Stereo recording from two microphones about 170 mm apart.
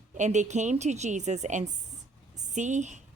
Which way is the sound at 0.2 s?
45° right (ahead or behind).